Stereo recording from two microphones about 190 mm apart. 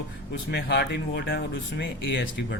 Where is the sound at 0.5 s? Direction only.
60° left (ahead or behind).